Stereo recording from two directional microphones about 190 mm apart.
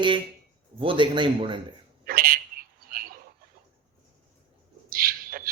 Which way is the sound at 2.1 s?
50° right (ahead or behind).